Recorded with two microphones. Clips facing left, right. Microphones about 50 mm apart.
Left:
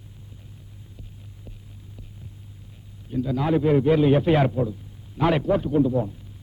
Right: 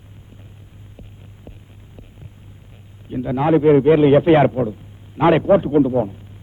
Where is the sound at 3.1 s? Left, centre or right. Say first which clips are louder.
Right 6 dB; right.